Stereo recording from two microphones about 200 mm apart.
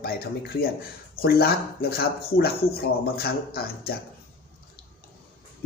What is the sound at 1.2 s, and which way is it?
Speech, 50° left (ahead or behind).